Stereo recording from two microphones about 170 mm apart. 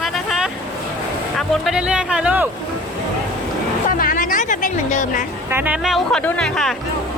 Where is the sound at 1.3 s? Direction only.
Centre (ahead or behind).